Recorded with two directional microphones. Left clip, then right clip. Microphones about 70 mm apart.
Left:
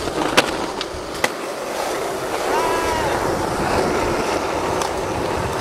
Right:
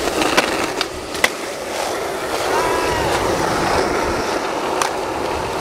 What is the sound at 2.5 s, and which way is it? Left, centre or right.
Vehicle, centre.